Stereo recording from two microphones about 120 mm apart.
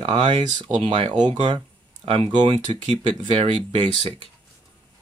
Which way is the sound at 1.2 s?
45° right (ahead or behind).